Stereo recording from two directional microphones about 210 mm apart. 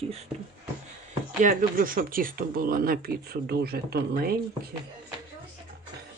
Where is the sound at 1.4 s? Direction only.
40° right (ahead or behind).